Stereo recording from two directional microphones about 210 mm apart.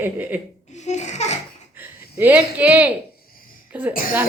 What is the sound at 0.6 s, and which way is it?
Laughter, 35° left (ahead or behind).